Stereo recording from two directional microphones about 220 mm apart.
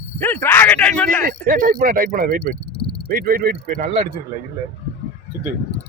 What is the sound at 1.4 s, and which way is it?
Speech, 40° right (ahead or behind).